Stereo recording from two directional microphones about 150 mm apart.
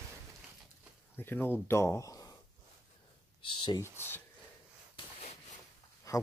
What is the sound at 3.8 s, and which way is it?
Speech, 15° right (ahead or behind).